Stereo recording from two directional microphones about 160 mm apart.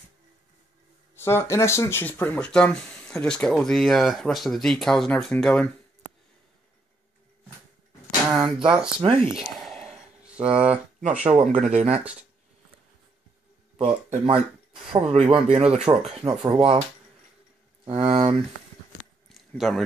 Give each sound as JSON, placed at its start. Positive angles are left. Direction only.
{"t": 1.1, "sound": "speech", "side_deg": 15}
{"t": 8.3, "sound": "speech", "side_deg": -5}
{"t": 8.6, "sound": "speech", "side_deg": -30}
{"t": 9.3, "sound": "a sound", "side_deg": 0}
{"t": 11.0, "sound": "speech", "side_deg": -40}
{"t": 13.7, "sound": "speech", "side_deg": -35}
{"t": 16.2, "sound": "speech", "side_deg": -25}
{"t": 16.5, "sound": "speech", "side_deg": -40}
{"t": 17.8, "sound": "speech", "side_deg": -35}
{"t": 19.2, "sound": "a sound", "side_deg": 0}